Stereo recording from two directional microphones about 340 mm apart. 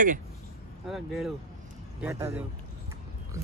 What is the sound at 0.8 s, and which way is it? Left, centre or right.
Speech, centre.